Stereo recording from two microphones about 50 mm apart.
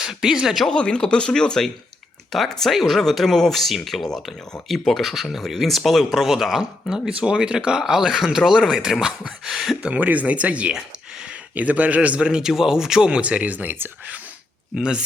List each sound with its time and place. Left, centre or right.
0.0 s speech: centre
0.6 s speech: centre
7.1 s speech: centre
9.9 s a man's voice: right
14.8 s speech: centre